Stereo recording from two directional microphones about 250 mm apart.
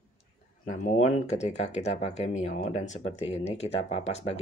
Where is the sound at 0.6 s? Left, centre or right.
Left.